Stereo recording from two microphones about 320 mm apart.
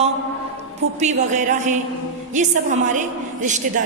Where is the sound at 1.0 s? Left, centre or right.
Right.